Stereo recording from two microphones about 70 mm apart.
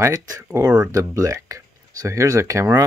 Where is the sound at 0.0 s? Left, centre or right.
Right.